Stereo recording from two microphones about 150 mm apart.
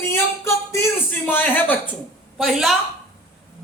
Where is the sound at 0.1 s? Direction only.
15° left (ahead or behind).